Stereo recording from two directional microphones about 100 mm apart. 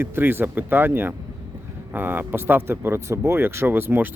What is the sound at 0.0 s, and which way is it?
Speech, 20° right (ahead or behind).